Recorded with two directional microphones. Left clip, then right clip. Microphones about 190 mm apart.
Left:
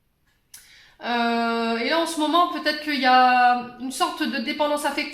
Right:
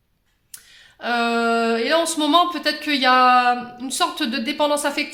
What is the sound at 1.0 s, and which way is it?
Speech, 45° right (ahead or behind).